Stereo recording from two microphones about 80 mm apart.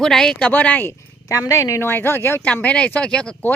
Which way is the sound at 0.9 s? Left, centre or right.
Left.